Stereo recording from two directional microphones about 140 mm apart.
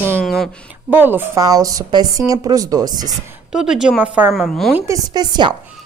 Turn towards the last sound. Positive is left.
turn(degrees=-30)  # may be behind; listen again after turning